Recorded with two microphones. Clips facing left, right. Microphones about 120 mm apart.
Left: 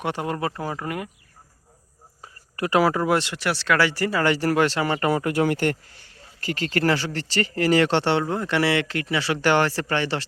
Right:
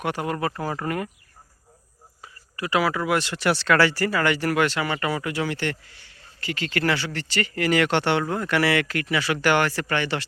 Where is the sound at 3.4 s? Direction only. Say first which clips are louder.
Right 2 dB; 5° left (ahead or behind); by 10.2 s 30° left (ahead or behind).